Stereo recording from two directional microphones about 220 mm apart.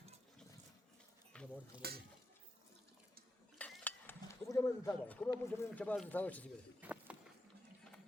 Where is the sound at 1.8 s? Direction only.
45° right (ahead or behind).